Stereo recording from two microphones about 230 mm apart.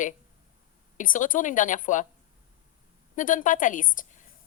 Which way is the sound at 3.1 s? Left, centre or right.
Left.